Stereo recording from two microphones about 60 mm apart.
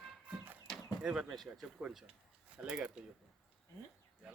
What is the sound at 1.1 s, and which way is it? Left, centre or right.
Speech, centre.